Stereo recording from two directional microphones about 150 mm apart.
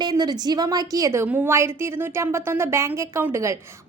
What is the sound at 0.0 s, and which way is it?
A woman's voice, 30° right (ahead or behind).